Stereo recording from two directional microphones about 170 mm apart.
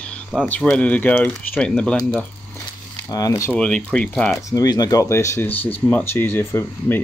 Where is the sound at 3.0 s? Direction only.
20° left (ahead or behind).